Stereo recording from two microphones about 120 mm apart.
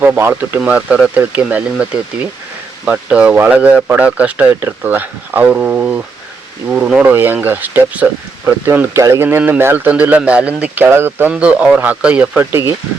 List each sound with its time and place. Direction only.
0.0 s speech: 20° right (ahead or behind)